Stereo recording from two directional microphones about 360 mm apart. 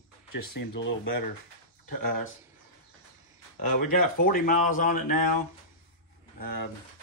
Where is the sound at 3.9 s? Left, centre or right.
Left.